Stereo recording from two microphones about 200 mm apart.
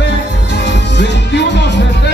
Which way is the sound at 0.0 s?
60° left (ahead or behind).